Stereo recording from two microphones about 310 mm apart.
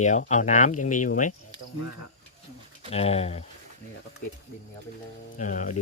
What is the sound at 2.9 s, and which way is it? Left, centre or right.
Speech, centre.